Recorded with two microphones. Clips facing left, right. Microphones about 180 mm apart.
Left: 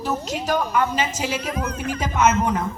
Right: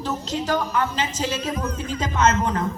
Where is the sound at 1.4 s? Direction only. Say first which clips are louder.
Even; 65° left (ahead or behind).